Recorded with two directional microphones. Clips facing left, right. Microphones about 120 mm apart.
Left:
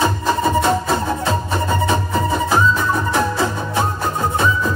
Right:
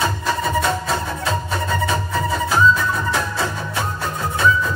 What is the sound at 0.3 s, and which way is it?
Music, 25° left (ahead or behind).